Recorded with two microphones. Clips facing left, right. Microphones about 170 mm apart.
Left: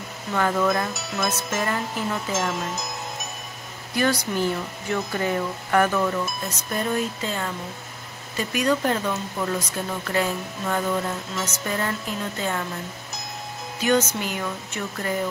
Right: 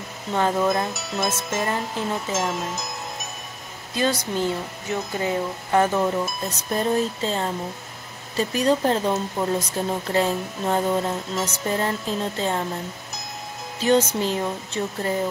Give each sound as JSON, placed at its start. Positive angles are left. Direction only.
{"t": 0.3, "sound": "speech", "side_deg": -20}
{"t": 0.9, "sound": "music", "side_deg": 0}
{"t": 1.6, "sound": "speech", "side_deg": -20}
{"t": 2.3, "sound": "speech", "side_deg": 0}
{"t": 3.9, "sound": "speech", "side_deg": -20}
{"t": 13.7, "sound": "speech", "side_deg": -30}